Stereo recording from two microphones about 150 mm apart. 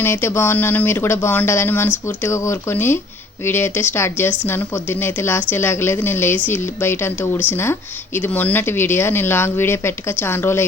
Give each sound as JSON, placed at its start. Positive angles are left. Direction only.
{"t": 0.0, "sound": "speech", "side_deg": 15}